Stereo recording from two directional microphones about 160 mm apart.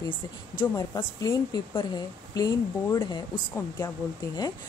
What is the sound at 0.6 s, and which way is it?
A woman's voice, 25° left (ahead or behind).